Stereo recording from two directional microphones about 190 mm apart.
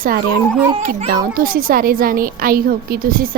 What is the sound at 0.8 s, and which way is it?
A woman's voice, 40° right (ahead or behind).